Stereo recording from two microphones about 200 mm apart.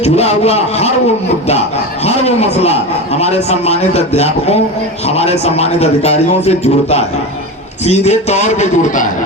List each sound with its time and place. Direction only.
0.0 s a man's voice: 35° left (ahead or behind)
2.0 s a man's voice: 30° left (ahead or behind)